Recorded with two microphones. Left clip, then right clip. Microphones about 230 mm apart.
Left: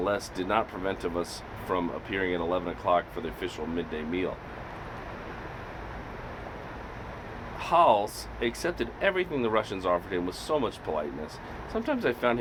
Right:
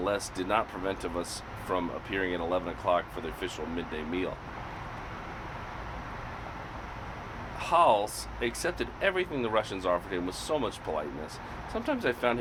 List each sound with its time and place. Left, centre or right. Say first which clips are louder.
0.0 s speech: left 2 dB; left
7.6 s speech: left 2 dB; left